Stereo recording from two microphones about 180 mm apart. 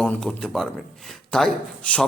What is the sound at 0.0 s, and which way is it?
A man's voice, 5° left (ahead or behind).